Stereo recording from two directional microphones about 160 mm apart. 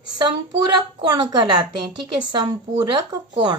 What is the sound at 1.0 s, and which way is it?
Speech, 25° right (ahead or behind).